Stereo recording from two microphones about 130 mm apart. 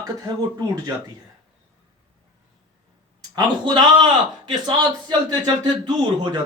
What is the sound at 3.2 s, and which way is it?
A man's voice, 35° right (ahead or behind).